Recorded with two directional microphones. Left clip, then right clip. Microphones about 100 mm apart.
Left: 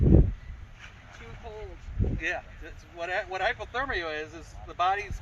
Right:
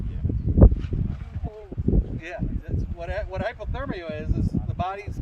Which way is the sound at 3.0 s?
60° right (ahead or behind).